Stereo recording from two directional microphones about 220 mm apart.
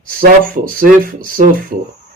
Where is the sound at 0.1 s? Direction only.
40° right (ahead or behind).